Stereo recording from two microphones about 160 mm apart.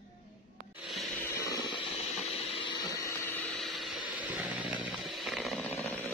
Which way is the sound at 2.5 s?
30° left (ahead or behind).